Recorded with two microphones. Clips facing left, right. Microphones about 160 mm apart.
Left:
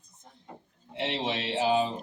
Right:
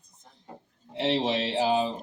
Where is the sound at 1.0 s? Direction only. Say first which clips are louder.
Right 5 dB; 40° right (ahead or behind).